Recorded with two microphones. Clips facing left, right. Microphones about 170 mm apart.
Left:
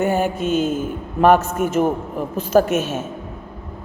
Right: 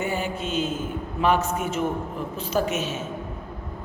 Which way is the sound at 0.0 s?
50° left (ahead or behind).